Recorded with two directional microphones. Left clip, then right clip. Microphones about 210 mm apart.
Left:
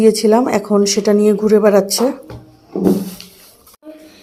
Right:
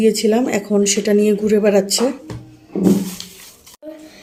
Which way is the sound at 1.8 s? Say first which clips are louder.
Left 2 dB; 35° left (ahead or behind).